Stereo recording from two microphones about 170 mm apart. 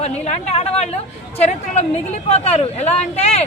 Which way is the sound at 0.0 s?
40° left (ahead or behind).